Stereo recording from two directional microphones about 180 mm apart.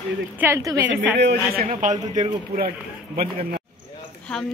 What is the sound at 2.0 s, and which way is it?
Speech, 20° right (ahead or behind).